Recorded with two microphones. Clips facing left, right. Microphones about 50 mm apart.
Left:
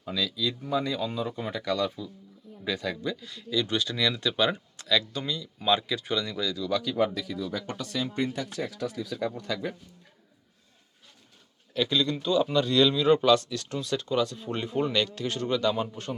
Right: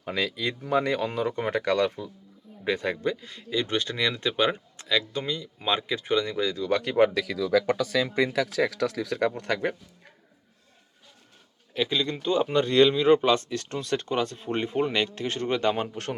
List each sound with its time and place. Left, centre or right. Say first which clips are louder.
0.0 s speech: right 2 dB; right
2.6 s speech: right 4 dB; right
11.7 s speech: even; right